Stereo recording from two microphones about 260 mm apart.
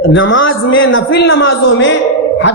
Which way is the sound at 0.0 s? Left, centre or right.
Left.